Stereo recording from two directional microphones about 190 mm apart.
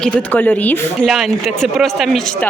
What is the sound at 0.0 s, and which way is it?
Speech, 10° left (ahead or behind).